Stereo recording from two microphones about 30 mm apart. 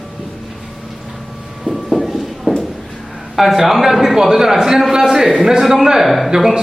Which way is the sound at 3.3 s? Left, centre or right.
Centre.